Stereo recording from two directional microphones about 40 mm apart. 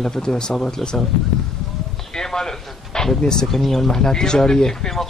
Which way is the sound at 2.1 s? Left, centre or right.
Centre.